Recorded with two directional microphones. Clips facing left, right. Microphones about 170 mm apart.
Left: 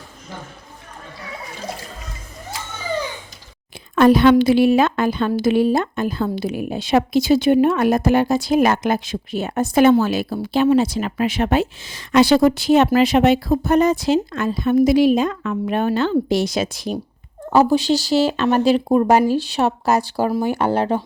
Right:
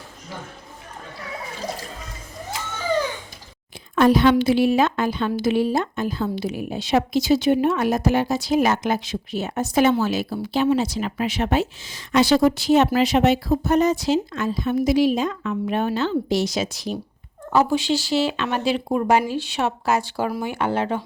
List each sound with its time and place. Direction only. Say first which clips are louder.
3.9 s a woman's voice: left 4 dB; 60° left (ahead or behind)
17.5 s speech: left 4 dB; 35° left (ahead or behind)